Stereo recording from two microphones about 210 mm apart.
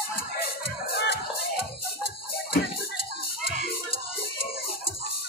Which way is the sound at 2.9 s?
45° left (ahead or behind).